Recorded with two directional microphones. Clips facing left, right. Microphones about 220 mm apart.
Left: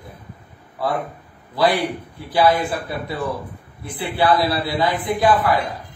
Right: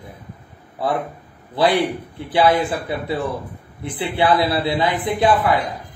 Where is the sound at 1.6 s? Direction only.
25° right (ahead or behind).